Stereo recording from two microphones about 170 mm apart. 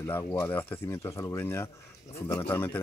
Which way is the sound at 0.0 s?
20° left (ahead or behind).